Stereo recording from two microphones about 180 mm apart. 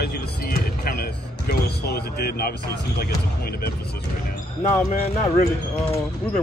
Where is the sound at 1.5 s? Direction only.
60° left (ahead or behind).